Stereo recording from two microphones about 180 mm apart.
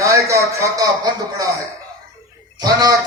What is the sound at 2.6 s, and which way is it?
Speech, 20° right (ahead or behind).